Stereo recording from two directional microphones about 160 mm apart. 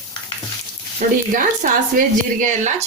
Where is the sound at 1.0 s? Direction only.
55° right (ahead or behind).